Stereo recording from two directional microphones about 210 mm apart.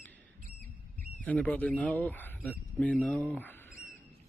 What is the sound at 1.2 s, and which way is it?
Speech, 5° left (ahead or behind).